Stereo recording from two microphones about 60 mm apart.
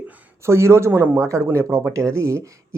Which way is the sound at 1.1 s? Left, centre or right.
Right.